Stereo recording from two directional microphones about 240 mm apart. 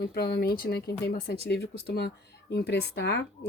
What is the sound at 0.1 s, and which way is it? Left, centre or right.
Speech, left.